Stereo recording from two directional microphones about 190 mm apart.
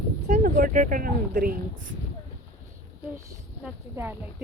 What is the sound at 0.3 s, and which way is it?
Speech, 45° right (ahead or behind).